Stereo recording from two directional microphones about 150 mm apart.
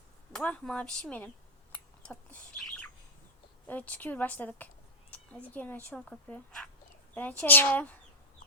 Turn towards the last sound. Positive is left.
turn(degrees=10)  # may be behind; listen again after turning